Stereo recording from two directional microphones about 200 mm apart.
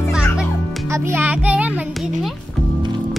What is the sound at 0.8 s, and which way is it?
A child's voice, 15° right (ahead or behind).